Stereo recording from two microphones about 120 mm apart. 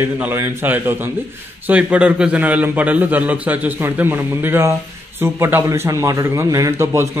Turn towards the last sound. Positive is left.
turn(degrees=-20)  # may be behind; listen again after turning